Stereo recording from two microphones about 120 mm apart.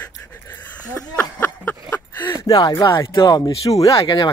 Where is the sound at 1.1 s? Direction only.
15° left (ahead or behind).